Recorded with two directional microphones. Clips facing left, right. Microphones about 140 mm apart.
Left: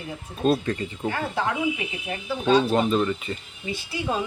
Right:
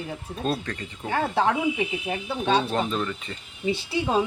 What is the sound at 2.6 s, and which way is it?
Speech, 5° left (ahead or behind).